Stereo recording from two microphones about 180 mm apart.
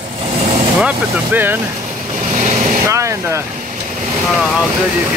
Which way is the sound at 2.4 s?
40° right (ahead or behind).